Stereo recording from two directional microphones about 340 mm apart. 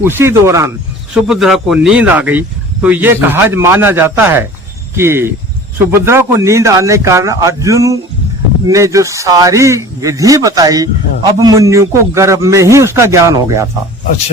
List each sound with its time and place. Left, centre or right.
0.0 s speech: centre